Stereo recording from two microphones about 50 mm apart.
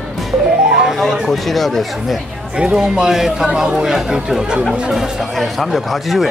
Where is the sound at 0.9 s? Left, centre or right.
Centre.